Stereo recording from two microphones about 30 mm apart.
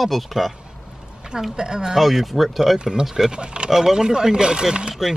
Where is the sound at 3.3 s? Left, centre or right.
Right.